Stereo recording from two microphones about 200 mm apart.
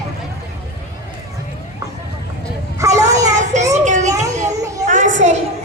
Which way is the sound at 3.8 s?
40° right (ahead or behind).